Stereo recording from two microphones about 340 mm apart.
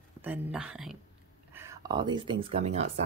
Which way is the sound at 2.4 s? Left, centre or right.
Centre.